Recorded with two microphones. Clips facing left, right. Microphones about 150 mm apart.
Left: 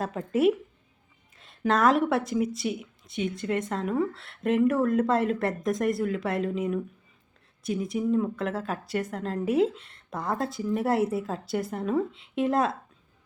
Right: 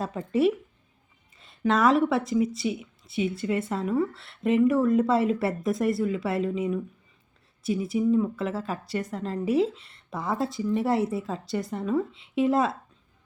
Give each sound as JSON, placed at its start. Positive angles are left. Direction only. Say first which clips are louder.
{"t": 0.0, "sound": "speech", "louder": "even", "side_deg": 0}